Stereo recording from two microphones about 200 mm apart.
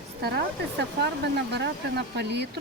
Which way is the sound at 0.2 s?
55° right (ahead or behind).